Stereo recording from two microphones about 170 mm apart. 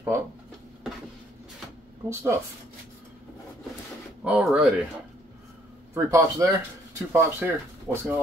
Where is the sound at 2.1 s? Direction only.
15° right (ahead or behind).